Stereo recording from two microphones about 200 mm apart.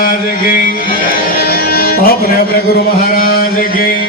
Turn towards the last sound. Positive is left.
turn(degrees=50)  # may be behind; listen again after turning